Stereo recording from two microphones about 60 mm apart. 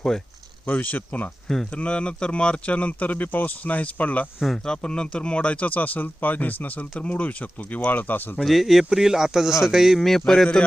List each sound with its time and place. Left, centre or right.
0.6 s speech: left
4.4 s a man's voice: centre
4.6 s speech: centre; by 8.2 s left
8.4 s a man's voice: centre